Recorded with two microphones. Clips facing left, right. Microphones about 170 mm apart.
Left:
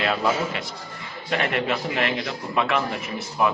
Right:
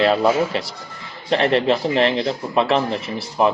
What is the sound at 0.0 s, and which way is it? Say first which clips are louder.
A man's voice: right 7 dB; 30° right (ahead or behind).